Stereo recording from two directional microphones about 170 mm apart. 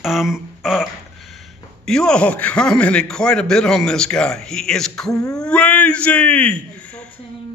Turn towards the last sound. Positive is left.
turn(degrees=5)  # may be behind; listen again after turning